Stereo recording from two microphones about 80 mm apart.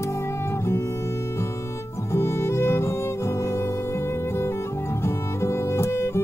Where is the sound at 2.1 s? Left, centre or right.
Left.